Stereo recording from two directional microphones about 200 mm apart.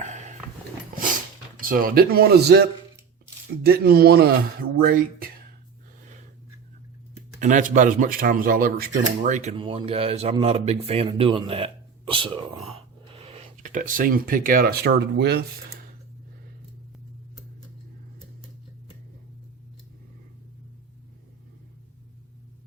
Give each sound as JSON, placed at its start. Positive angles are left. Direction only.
{"t": 0.0, "sound": "dog", "side_deg": -35}
{"t": 1.6, "sound": "speech", "side_deg": -45}
{"t": 7.3, "sound": "speech", "side_deg": -40}